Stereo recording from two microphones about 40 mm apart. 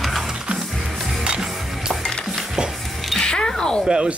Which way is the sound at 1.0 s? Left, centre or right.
Centre.